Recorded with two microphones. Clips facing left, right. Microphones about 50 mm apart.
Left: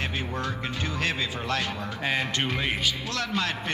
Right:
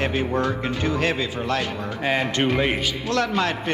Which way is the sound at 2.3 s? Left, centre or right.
Right.